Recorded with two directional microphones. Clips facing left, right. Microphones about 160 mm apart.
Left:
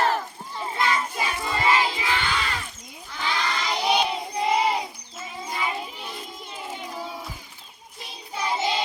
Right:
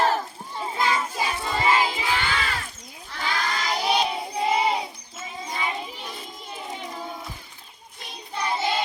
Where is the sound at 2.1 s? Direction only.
Centre (ahead or behind).